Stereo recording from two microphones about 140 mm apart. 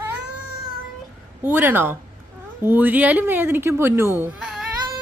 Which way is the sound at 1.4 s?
15° right (ahead or behind).